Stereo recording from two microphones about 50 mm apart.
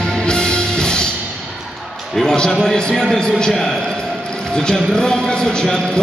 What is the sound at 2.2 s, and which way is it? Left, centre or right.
Speech, centre.